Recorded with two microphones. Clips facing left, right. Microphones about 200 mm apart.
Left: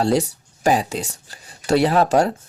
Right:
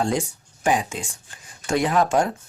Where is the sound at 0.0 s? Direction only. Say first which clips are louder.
Left 5 dB; 35° left (ahead or behind).